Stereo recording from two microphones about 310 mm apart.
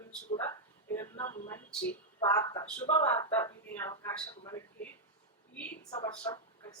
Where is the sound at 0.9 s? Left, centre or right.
Centre.